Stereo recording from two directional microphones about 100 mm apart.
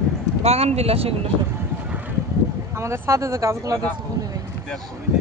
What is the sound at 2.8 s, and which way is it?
Speech, 30° right (ahead or behind).